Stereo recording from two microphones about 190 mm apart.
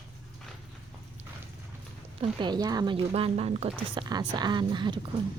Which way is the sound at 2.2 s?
25° right (ahead or behind).